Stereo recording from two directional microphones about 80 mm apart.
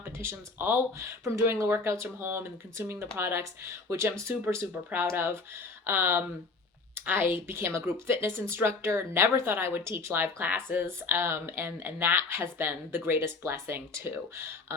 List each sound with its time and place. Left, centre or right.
0.0 s speech: right
4.4 s speech: right